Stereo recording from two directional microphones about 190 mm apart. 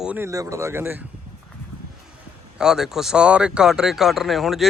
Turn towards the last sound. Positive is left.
turn(degrees=0)  # may be behind; listen again after turning